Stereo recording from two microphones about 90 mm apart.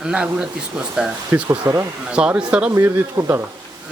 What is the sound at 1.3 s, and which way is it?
Speech, 30° right (ahead or behind).